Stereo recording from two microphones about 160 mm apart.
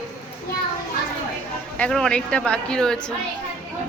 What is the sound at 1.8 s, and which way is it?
Speech, 5° left (ahead or behind).